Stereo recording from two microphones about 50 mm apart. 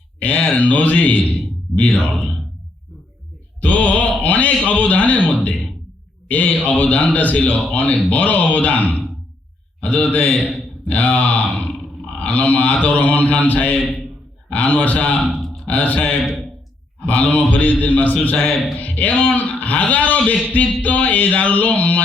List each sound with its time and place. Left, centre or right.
0.2 s speech: left
1.3 s a sound: left
3.6 s a man's voice: left